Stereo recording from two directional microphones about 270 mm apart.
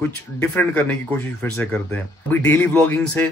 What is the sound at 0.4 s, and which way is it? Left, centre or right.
A man's voice, centre.